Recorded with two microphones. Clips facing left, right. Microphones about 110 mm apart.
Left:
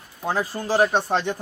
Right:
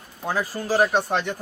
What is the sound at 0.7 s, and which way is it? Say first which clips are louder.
Speech: left 1 dB; centre (ahead or behind).